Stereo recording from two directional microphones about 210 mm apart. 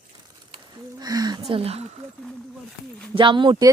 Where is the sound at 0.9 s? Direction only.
20° right (ahead or behind).